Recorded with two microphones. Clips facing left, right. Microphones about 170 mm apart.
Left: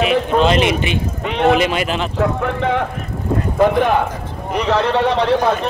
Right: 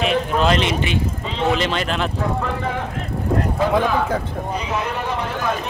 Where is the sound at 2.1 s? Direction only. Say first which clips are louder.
Left 5 dB; 65° left (ahead or behind).